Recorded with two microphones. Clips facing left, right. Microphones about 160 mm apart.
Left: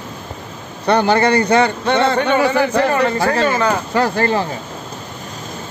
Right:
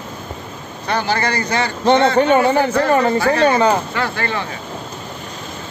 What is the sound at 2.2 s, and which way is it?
Speech, 35° right (ahead or behind).